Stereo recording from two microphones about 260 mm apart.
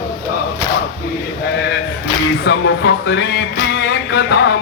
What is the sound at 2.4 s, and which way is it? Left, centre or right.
Music, left.